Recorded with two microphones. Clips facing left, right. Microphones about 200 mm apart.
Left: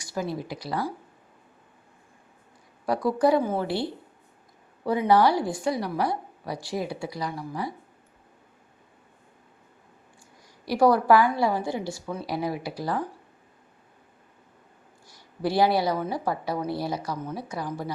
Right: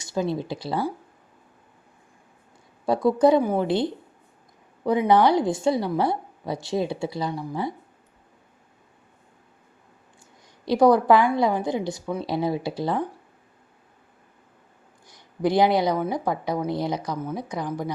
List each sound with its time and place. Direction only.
0.0 s a woman's voice: 25° right (ahead or behind)
2.8 s a woman's voice: 25° right (ahead or behind)
4.9 s a woman's voice: 20° right (ahead or behind)
10.7 s a woman's voice: 20° right (ahead or behind)
15.0 s a woman's voice: 20° right (ahead or behind)